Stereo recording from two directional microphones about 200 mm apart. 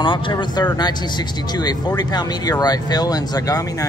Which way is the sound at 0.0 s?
25° left (ahead or behind).